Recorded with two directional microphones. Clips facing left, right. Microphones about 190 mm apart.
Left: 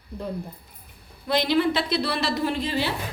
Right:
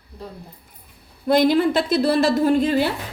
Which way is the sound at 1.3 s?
50° right (ahead or behind).